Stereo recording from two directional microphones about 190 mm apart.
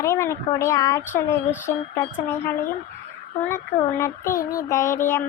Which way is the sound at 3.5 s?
15° left (ahead or behind).